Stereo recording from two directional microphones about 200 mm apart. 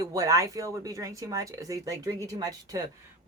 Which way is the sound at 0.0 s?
15° right (ahead or behind).